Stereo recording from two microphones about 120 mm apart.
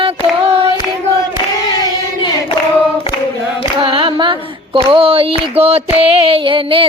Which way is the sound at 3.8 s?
50° right (ahead or behind).